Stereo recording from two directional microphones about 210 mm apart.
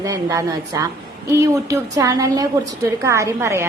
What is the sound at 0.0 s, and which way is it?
A woman's voice, 15° right (ahead or behind).